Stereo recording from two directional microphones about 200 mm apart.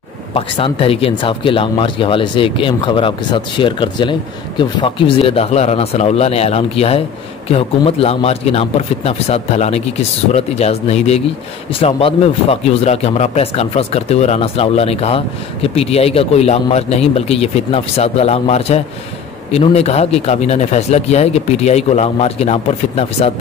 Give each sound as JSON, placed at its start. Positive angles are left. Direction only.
{"t": 0.3, "sound": "speech", "side_deg": 25}